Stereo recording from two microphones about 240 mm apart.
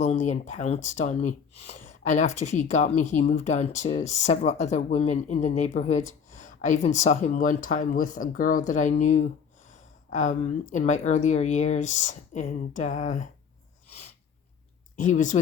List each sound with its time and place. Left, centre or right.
0.0 s speech: left
14.9 s speech: left